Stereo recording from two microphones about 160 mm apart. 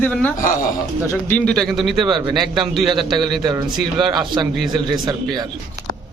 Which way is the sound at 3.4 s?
25° right (ahead or behind).